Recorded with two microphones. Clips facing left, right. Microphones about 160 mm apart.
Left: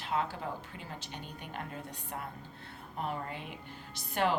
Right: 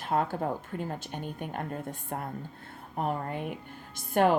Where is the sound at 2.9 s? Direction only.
50° right (ahead or behind).